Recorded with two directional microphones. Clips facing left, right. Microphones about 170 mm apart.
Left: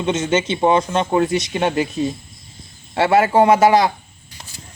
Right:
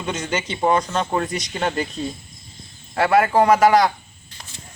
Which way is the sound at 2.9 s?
25° left (ahead or behind).